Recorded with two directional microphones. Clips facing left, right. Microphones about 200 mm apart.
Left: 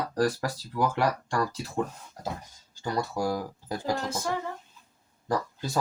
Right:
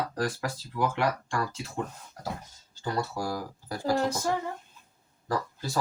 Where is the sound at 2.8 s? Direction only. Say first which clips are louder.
Left 2 dB; 15° left (ahead or behind).